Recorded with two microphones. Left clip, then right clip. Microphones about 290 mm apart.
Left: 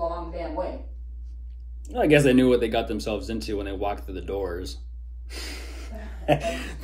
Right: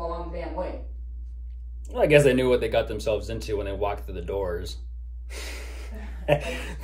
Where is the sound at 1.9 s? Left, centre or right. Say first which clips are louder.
Right 1 dB; centre.